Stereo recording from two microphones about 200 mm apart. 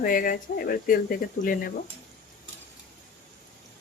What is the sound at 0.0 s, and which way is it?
Speech, 45° left (ahead or behind).